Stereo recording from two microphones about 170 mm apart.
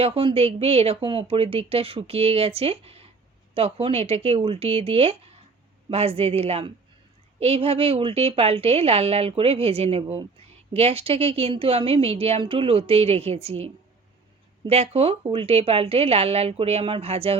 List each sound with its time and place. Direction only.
0.0 s speech: 35° right (ahead or behind)